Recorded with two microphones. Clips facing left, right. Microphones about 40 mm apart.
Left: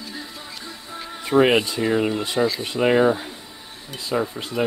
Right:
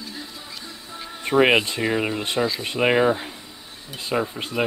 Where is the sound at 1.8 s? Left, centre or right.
Right.